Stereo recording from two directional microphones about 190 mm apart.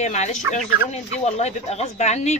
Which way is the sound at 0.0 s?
35° left (ahead or behind).